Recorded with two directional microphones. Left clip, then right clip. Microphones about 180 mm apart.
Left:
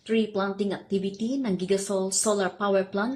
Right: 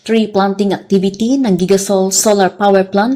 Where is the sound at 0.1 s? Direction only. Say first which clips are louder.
Right 13 dB; 35° right (ahead or behind).